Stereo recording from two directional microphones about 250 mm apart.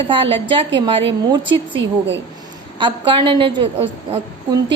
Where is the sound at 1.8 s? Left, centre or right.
Right.